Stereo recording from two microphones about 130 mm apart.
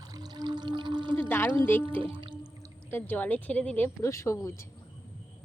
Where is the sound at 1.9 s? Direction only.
40° right (ahead or behind).